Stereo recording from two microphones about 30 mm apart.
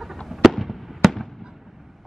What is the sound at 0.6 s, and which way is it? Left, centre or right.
Fireworks, centre.